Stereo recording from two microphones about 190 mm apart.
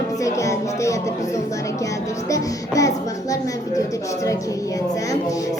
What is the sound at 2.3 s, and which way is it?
Music, 15° left (ahead or behind).